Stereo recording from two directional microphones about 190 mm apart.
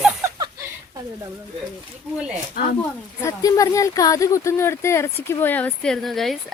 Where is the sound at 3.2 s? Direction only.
15° left (ahead or behind).